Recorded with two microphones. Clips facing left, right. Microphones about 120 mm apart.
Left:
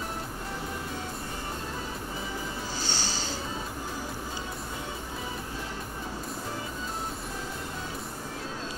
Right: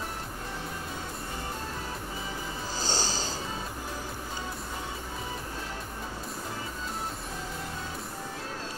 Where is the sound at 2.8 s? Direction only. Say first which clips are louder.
Right 5 dB; 40° right (ahead or behind).